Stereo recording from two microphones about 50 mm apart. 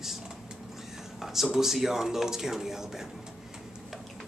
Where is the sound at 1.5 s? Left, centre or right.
Centre.